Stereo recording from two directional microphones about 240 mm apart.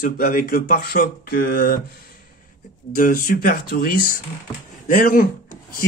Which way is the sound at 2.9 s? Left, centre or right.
Left.